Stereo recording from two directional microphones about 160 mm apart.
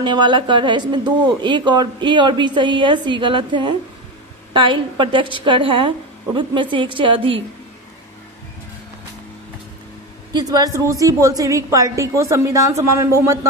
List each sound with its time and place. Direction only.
0.0 s a woman's voice: 30° right (ahead or behind)
10.3 s speech: 25° right (ahead or behind)